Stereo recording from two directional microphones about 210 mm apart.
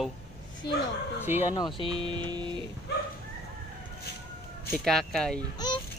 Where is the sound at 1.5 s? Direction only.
20° left (ahead or behind).